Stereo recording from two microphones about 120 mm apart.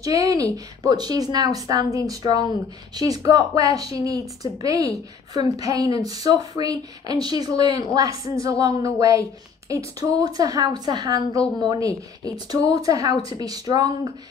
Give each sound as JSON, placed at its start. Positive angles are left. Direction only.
{"t": 0.0, "sound": "speech", "side_deg": -30}